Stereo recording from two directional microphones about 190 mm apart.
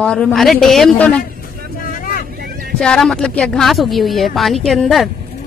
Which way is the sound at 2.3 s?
55° right (ahead or behind).